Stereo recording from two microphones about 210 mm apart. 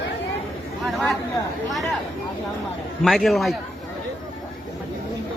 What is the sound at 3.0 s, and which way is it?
Speech, centre (ahead or behind).